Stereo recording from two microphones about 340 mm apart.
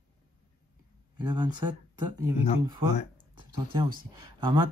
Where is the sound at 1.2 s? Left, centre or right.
Centre.